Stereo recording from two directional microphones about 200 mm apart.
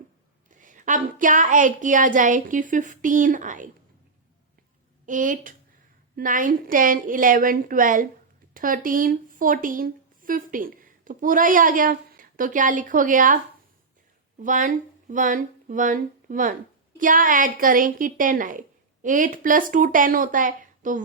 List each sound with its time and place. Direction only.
0.6 s a woman's voice: 40° right (ahead or behind)
5.0 s a woman's voice: 40° right (ahead or behind)
14.4 s a woman's voice: 40° right (ahead or behind)